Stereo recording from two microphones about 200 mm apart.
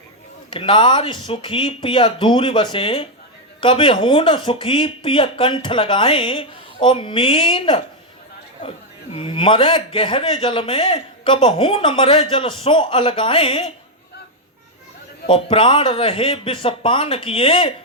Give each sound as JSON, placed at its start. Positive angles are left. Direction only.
{"t": 0.5, "sound": "a man's voice", "side_deg": 25}
{"t": 9.1, "sound": "a man's voice", "side_deg": 25}
{"t": 15.3, "sound": "a man's voice", "side_deg": 25}